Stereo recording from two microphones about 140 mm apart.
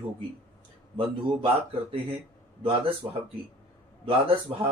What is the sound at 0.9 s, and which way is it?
Speech, 40° right (ahead or behind).